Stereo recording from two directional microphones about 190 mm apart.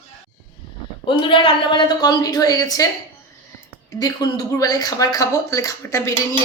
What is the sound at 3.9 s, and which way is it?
Speech, 20° left (ahead or behind).